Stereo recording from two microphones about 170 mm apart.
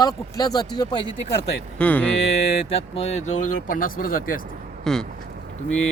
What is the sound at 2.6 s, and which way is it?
Speech, 35° left (ahead or behind).